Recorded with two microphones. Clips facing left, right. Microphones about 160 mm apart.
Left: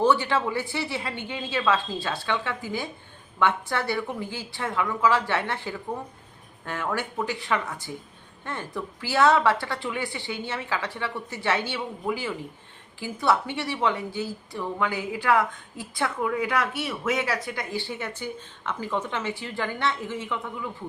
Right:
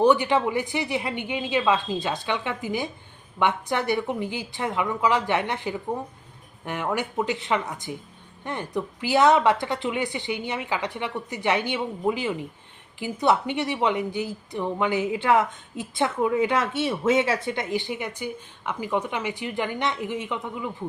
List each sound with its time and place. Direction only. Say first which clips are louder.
0.0 s a woman's voice: right 3 dB; 15° right (ahead or behind)